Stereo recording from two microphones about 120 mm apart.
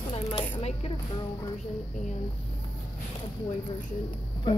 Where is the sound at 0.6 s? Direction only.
55° left (ahead or behind).